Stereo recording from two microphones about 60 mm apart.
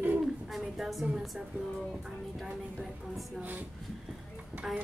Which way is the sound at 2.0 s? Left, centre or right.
Centre.